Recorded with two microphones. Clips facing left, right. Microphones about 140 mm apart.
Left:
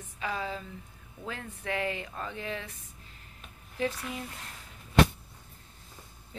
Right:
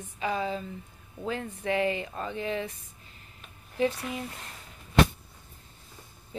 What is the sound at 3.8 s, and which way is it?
Speech, 5° right (ahead or behind).